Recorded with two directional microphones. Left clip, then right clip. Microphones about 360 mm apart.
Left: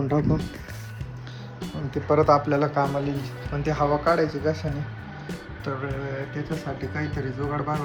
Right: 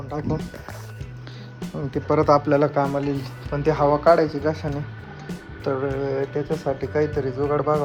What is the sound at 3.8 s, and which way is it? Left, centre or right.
Speech, right.